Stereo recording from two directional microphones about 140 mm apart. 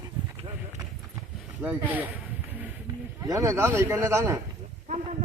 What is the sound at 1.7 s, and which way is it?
Speech, 10° right (ahead or behind).